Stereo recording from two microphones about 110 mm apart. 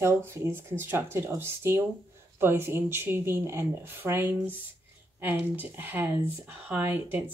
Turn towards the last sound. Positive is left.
turn(degrees=-15)  # may be behind; listen again after turning